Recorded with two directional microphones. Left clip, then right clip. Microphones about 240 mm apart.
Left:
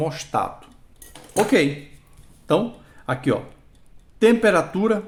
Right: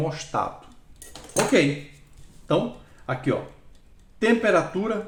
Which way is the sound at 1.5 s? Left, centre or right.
Left.